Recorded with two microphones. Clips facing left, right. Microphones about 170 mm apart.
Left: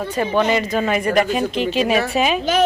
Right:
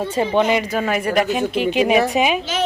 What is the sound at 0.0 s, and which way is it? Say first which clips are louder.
Speech: right 1 dB; 25° right (ahead or behind).